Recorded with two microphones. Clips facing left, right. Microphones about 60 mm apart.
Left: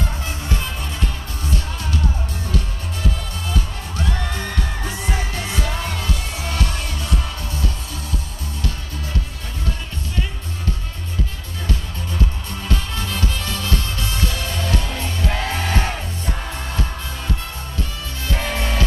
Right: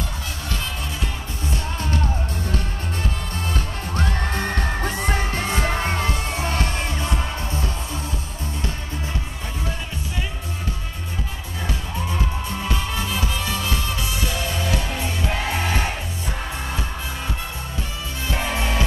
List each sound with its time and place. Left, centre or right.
1.5 s music: right
3.5 s music: right
12.6 s music: centre
18.3 s music: centre